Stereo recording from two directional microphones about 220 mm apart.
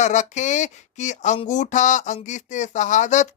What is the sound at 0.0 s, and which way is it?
Speech, 35° left (ahead or behind).